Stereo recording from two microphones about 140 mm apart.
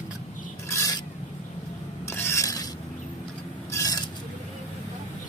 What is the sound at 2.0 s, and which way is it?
Filing, 20° left (ahead or behind).